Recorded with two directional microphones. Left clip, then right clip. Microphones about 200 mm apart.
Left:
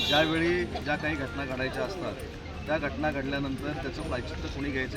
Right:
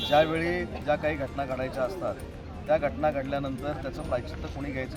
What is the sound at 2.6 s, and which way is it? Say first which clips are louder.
Speech: right 4 dB; 20° right (ahead or behind).